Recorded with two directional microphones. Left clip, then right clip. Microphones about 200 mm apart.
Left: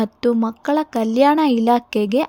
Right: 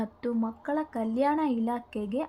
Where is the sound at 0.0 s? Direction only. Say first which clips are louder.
Left 13 dB; 50° left (ahead or behind).